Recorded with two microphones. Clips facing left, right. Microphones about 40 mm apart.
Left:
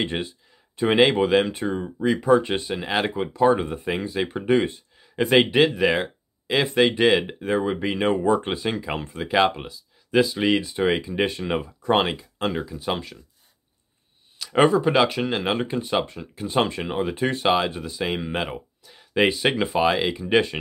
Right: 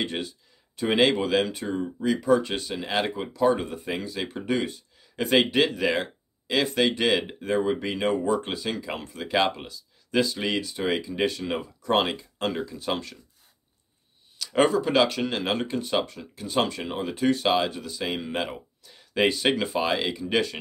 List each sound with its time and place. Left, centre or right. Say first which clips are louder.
0.0 s speech: left 3 dB; left
2.8 s speech: left 1 dB; centre
3.1 s speech: left 5 dB; left
14.4 s speech: left 4 dB; centre